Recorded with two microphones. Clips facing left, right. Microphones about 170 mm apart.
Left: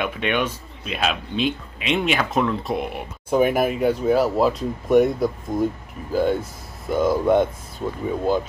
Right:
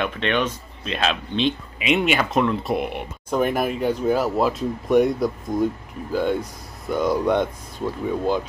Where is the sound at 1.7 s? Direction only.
5° right (ahead or behind).